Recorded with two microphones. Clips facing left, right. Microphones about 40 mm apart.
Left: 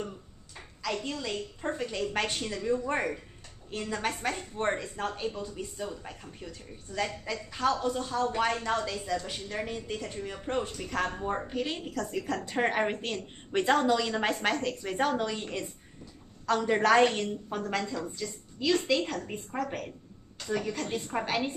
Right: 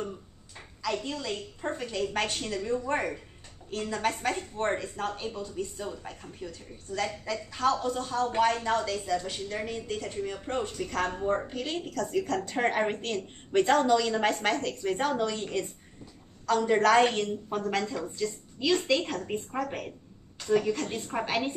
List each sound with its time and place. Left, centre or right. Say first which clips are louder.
0.6 s a woman's voice: right 2 dB; centre
17.1 s speech: right 2 dB; centre